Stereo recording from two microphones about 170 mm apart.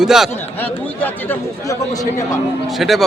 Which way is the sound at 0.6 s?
10° left (ahead or behind).